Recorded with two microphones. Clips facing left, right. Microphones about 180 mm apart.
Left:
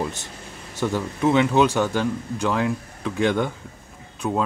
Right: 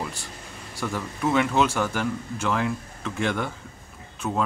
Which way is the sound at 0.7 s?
20° left (ahead or behind).